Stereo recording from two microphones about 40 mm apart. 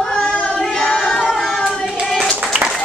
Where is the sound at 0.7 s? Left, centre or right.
Centre.